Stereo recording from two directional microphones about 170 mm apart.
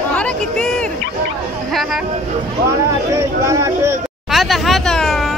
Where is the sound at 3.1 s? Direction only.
20° right (ahead or behind).